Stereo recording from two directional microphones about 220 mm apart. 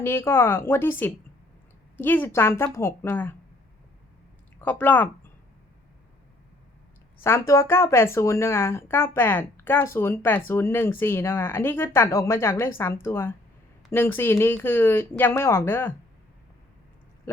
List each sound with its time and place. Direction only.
0.0 s speech: 10° left (ahead or behind)
4.6 s speech: 10° left (ahead or behind)
7.2 s speech: 10° left (ahead or behind)